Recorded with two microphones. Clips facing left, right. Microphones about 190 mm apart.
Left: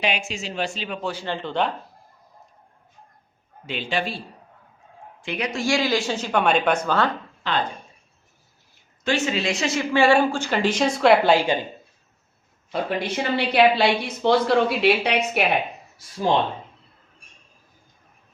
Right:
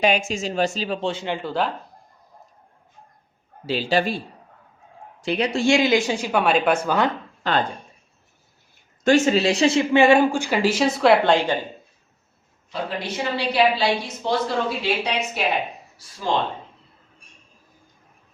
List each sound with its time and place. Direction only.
0.0 s speech: 45° right (ahead or behind); by 1.7 s 5° right (ahead or behind)
3.7 s speech: 35° right (ahead or behind)
5.2 s speech: 35° right (ahead or behind); by 7.1 s 15° right (ahead or behind)
7.4 s speech: 45° right (ahead or behind)
9.0 s speech: 45° right (ahead or behind); by 11.5 s 5° left (ahead or behind)
12.7 s a woman's voice: 55° left (ahead or behind)